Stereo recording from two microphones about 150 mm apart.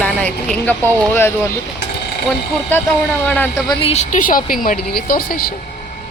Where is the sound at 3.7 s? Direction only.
45° left (ahead or behind); by 5.5 s 75° left (ahead or behind).